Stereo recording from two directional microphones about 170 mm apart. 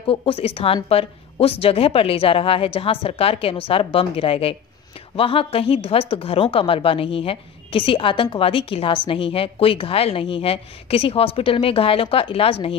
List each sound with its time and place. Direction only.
0.0 s a woman's voice: 30° left (ahead or behind)